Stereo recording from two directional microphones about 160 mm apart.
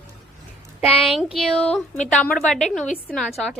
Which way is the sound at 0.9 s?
35° left (ahead or behind).